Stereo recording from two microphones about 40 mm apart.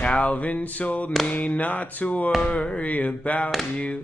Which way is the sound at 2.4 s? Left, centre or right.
Left.